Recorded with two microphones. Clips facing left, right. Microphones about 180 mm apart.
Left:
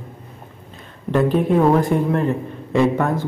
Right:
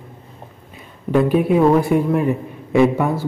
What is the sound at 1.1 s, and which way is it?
A man's voice, 10° right (ahead or behind).